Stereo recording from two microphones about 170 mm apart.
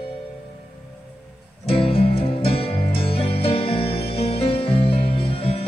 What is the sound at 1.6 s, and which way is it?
Music, 35° left (ahead or behind).